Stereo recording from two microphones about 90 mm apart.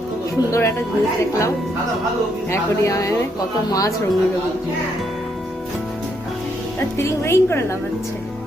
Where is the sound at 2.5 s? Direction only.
35° left (ahead or behind).